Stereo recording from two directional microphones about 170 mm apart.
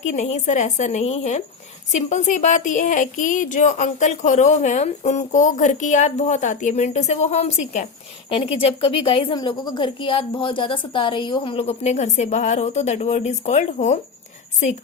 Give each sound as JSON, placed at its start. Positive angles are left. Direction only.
{"t": 0.0, "sound": "a woman's voice", "side_deg": 45}
{"t": 8.3, "sound": "a woman's voice", "side_deg": 30}